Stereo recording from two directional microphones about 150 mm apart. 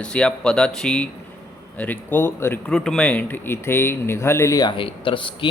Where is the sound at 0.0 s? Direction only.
5° left (ahead or behind).